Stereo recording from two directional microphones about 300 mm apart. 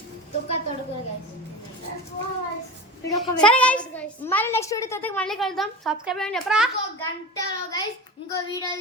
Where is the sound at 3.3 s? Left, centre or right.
Centre.